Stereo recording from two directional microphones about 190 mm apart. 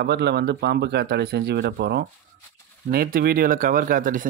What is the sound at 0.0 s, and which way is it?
A man's voice, 60° right (ahead or behind).